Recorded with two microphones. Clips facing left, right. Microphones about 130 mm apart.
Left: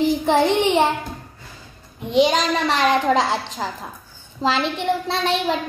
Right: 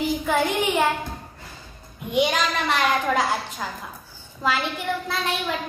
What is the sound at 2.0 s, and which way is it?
A child's voice, 30° left (ahead or behind).